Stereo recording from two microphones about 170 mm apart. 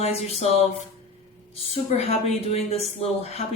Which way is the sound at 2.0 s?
35° left (ahead or behind).